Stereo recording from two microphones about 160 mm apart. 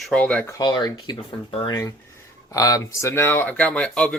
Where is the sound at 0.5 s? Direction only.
25° left (ahead or behind).